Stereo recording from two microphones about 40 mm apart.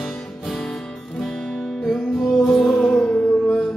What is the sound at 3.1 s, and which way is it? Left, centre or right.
Music, left.